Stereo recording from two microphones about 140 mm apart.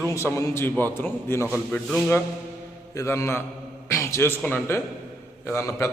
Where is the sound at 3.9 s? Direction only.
20° left (ahead or behind).